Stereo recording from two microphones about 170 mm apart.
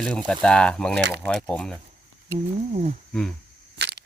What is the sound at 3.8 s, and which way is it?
Camera, 80° right.